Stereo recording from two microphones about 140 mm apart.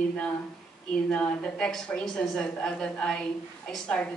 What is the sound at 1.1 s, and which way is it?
A woman's voice, 5° left (ahead or behind).